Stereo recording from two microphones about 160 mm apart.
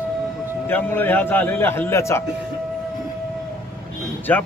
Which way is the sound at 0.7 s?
10° left (ahead or behind).